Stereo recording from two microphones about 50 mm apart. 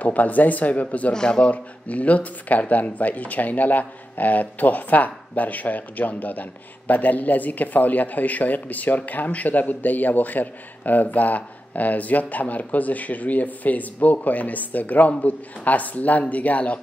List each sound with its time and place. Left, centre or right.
0.0 s speech: left
1.1 s a man's voice: centre
1.5 s speech: left